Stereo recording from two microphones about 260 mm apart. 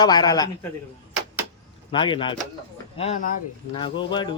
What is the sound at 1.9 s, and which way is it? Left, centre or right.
Speech, centre.